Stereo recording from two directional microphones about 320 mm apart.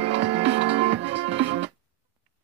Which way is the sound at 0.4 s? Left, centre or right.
Right.